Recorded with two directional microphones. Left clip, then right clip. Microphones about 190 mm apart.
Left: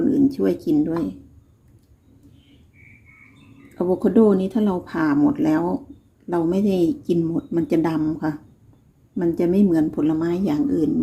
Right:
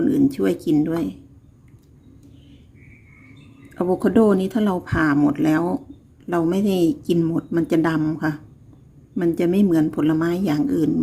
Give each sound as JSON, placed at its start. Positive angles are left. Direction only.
{"t": 0.0, "sound": "speech", "side_deg": -20}
{"t": 3.8, "sound": "speech", "side_deg": -25}